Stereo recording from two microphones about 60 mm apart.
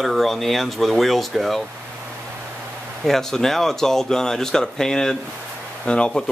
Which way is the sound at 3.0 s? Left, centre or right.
Centre.